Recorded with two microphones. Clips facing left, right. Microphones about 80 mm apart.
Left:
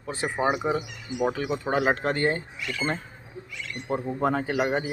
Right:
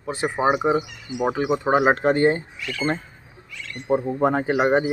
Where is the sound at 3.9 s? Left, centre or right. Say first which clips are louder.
Right 6 dB; centre.